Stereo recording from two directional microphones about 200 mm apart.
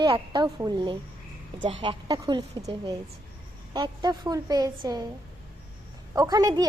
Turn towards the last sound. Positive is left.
turn(degrees=-20)  # may be behind; listen again after turning